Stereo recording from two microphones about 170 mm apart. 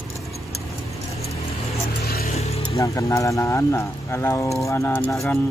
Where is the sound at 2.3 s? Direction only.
35° left (ahead or behind).